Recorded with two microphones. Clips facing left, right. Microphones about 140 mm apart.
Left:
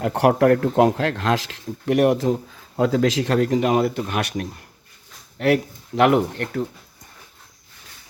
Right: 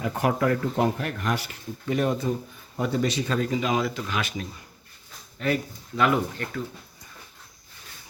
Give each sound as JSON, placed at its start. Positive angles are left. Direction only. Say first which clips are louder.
{"t": 0.0, "sound": "speech", "louder": "left 7 dB", "side_deg": 65}